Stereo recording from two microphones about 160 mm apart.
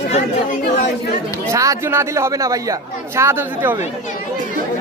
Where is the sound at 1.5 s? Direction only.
20° right (ahead or behind).